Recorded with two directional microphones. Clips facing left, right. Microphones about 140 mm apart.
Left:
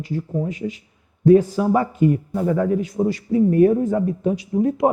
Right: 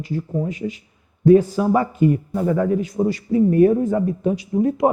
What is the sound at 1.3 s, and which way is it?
A man's voice, 20° right (ahead or behind).